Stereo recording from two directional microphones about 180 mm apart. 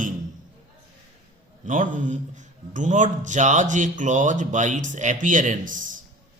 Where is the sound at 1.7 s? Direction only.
45° right (ahead or behind).